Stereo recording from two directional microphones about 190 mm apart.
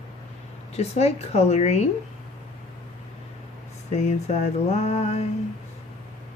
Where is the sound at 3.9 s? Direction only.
35° left (ahead or behind).